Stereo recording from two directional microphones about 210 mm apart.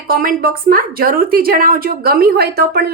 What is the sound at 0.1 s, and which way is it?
A woman's voice, 45° right (ahead or behind).